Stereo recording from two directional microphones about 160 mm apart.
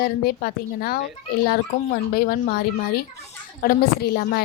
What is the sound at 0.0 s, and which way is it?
A child's voice, 70° left (ahead or behind).